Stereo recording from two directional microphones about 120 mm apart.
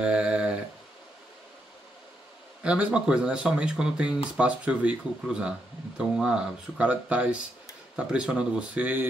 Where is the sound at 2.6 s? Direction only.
10° right (ahead or behind).